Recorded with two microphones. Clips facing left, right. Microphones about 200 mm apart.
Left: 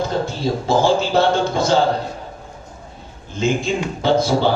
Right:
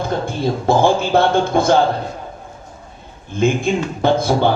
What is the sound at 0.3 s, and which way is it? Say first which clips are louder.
A man's voice: right 2 dB; 55° right (ahead or behind).